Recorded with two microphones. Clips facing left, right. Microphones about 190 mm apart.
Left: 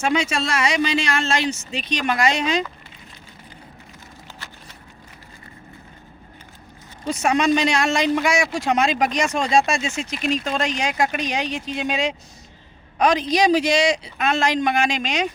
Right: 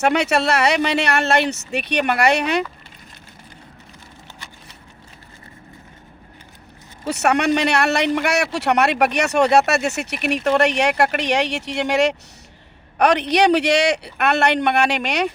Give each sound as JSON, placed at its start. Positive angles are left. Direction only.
{"t": 0.0, "sound": "speech", "side_deg": -65}
{"t": 7.1, "sound": "speech", "side_deg": -65}